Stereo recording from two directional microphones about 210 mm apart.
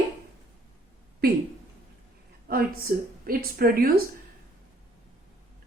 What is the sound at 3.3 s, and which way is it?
Speech, 45° right (ahead or behind).